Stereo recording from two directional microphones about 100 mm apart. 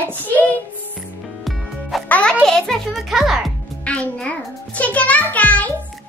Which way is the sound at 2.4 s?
5° left (ahead or behind).